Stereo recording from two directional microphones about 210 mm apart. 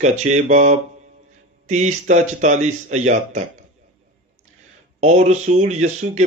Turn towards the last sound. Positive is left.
turn(degrees=-35)  # may be behind; listen again after turning